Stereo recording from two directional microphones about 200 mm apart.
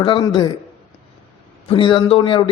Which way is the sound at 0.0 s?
20° left (ahead or behind).